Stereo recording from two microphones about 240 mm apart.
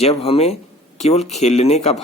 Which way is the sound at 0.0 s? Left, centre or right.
Left.